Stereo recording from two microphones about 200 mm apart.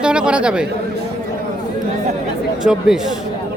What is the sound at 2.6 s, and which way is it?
Speech, 5° right (ahead or behind).